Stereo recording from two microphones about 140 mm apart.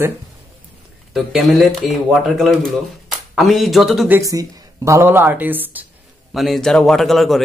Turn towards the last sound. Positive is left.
turn(degrees=0)  # may be behind; listen again after turning